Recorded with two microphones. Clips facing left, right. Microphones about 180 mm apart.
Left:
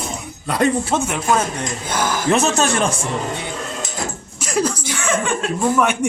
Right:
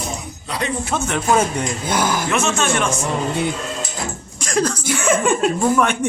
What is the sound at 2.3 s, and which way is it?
Speech, 35° left (ahead or behind).